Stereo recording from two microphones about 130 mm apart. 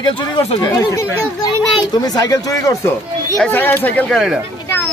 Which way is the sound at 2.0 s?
30° left (ahead or behind).